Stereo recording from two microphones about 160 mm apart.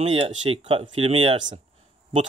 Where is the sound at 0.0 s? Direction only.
35° right (ahead or behind).